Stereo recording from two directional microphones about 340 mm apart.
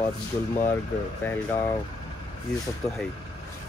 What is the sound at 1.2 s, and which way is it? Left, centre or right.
Speech, centre.